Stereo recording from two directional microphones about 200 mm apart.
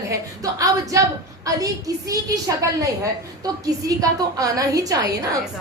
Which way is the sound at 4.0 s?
15° right (ahead or behind).